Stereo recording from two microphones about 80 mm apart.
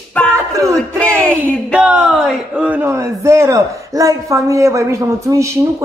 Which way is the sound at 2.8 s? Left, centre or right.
Right.